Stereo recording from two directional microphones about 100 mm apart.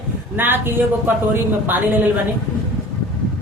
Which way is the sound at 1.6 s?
20° right (ahead or behind).